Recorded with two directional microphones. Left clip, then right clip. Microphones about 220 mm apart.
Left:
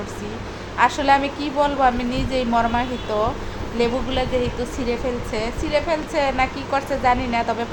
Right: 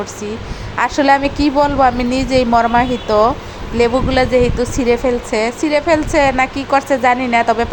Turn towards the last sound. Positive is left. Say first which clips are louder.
# right 8 dB
turn(degrees=-30)  # may be behind; listen again after turning